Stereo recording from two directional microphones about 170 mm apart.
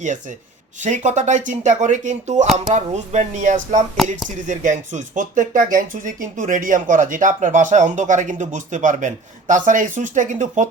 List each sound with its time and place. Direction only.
0.8 s speech: 45° right (ahead or behind)